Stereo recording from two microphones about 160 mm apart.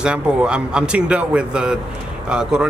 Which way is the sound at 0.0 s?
5° right (ahead or behind).